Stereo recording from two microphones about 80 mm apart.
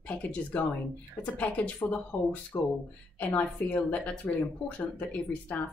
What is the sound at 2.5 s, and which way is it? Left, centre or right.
Speech, left.